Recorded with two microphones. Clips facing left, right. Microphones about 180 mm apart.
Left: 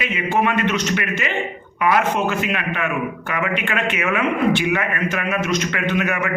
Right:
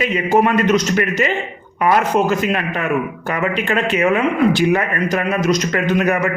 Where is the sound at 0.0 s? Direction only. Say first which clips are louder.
Right 5 dB; 40° right (ahead or behind).